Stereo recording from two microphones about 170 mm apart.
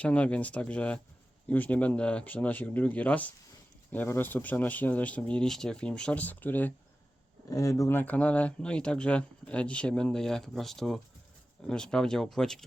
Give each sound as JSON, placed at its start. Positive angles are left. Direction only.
{"t": 0.0, "sound": "speech", "side_deg": 5}